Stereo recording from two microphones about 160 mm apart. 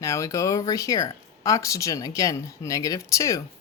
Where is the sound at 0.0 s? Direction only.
20° left (ahead or behind).